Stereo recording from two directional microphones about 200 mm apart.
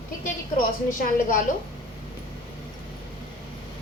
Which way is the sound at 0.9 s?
40° left (ahead or behind).